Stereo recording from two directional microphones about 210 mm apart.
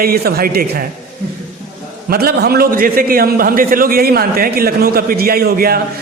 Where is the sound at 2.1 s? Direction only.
45° right (ahead or behind).